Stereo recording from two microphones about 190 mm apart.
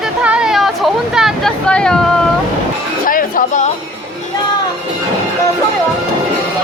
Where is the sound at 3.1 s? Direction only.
45° left (ahead or behind).